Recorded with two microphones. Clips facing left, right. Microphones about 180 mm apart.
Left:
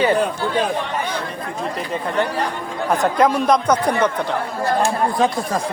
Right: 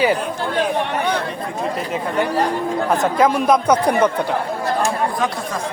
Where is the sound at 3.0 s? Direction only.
Centre (ahead or behind).